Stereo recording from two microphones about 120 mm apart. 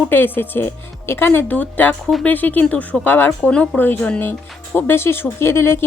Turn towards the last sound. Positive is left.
turn(degrees=20)  # may be behind; listen again after turning